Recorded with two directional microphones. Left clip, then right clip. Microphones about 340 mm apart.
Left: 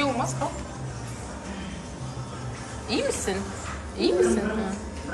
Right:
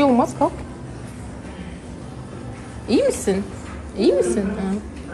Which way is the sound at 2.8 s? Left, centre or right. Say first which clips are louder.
Right 8 dB; centre.